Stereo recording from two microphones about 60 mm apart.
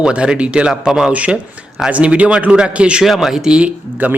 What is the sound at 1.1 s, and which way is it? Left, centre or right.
A man's voice, right.